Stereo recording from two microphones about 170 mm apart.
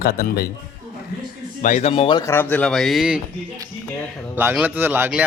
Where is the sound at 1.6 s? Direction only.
45° left (ahead or behind); by 2.3 s 25° left (ahead or behind).